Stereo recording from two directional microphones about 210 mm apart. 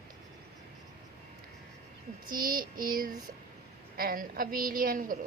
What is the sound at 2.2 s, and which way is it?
A woman's voice, 40° right (ahead or behind).